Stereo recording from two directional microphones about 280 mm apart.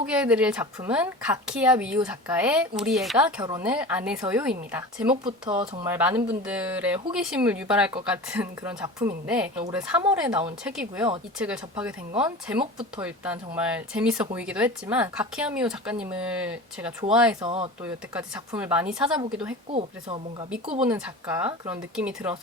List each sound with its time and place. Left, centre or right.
0.0 s a woman's voice: centre
3.2 s a woman's voice: centre
5.2 s a woman's voice: centre
17.4 s speech: centre
17.8 s a woman's voice: centre
19.7 s speech: centre
20.7 s a woman's voice: centre